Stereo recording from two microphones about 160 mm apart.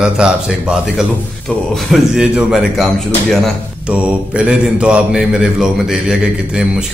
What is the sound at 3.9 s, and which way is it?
A man's voice, 5° right (ahead or behind).